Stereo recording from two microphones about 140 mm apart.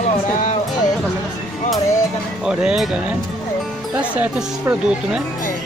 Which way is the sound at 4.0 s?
10° right (ahead or behind).